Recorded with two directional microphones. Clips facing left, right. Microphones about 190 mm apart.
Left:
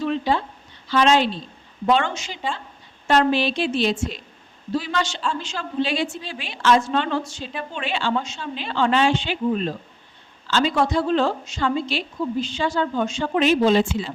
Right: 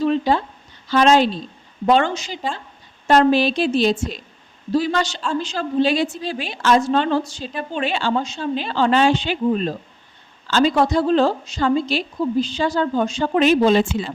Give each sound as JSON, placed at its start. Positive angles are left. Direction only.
{"t": 0.0, "sound": "a woman's voice", "side_deg": -40}